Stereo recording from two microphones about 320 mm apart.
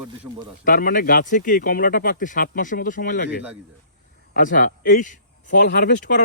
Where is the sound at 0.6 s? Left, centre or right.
Left.